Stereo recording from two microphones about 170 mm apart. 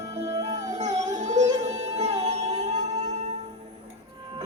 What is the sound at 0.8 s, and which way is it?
Music, 45° right (ahead or behind).